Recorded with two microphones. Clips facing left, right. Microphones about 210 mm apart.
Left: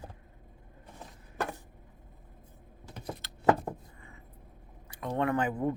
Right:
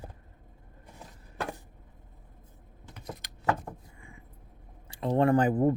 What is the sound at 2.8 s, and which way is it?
Typing, 35° left (ahead or behind).